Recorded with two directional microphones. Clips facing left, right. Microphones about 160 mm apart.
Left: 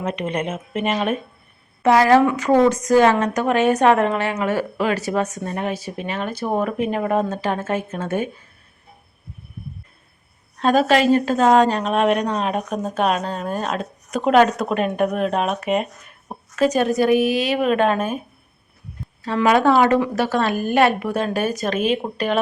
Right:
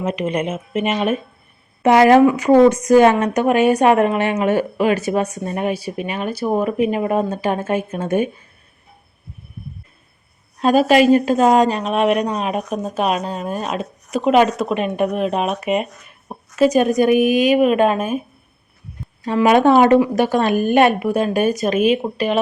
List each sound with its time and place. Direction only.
0.0 s a woman's voice: 5° right (ahead or behind)
1.8 s a woman's voice: 20° right (ahead or behind)
10.6 s a woman's voice: 10° right (ahead or behind)
19.2 s a woman's voice: 15° right (ahead or behind)